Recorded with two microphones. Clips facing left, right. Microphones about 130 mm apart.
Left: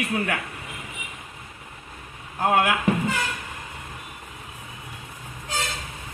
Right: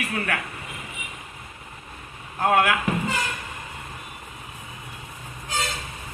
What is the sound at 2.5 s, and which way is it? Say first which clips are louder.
Speech: right 1 dB; 15° left (ahead or behind).